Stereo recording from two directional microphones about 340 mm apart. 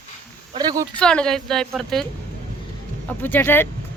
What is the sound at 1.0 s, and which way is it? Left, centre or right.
Speech, centre.